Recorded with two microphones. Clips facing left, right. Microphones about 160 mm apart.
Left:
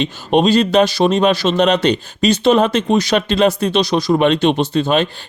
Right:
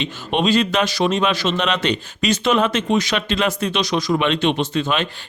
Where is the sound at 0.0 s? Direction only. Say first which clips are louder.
Left 6 dB; 40° left (ahead or behind).